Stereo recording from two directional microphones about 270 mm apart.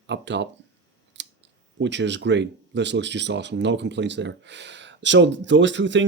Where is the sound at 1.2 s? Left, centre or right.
Right.